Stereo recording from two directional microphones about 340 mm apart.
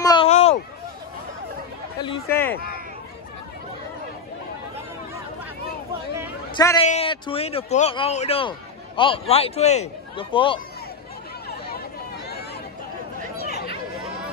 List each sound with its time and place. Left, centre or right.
0.0 s a sound: centre
2.0 s speech: centre
6.5 s speech: centre
13.4 s chatter: left